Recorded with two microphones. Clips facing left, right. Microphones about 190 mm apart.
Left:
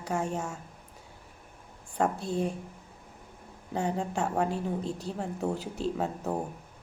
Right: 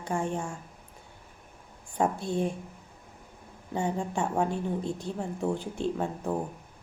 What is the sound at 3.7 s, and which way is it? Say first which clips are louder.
Speech: even; centre (ahead or behind).